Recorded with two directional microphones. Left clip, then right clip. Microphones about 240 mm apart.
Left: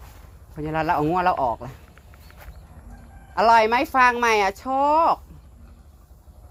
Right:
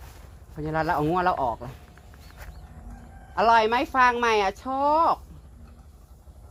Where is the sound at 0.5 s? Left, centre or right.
Left.